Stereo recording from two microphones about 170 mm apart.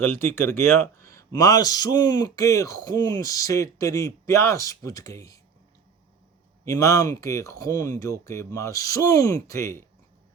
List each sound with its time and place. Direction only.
0.0 s speech: 15° left (ahead or behind)
6.7 s speech: 20° left (ahead or behind)